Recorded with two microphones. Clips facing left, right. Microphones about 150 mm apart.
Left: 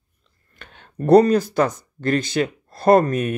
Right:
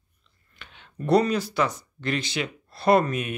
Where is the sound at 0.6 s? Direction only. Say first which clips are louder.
Left 7 dB; 50° left (ahead or behind).